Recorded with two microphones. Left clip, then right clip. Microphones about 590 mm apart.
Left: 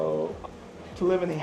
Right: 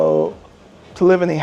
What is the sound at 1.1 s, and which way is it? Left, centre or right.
Speech, right.